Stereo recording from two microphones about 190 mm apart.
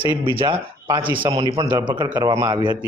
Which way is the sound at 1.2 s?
25° right (ahead or behind).